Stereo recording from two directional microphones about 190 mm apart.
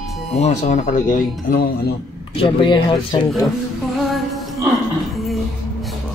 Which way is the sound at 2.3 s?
25° left (ahead or behind).